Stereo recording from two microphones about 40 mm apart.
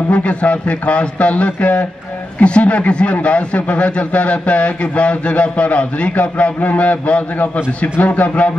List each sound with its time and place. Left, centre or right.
0.1 s speech: left